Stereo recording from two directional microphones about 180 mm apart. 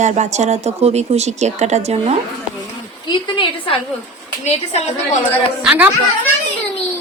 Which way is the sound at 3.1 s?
25° left (ahead or behind).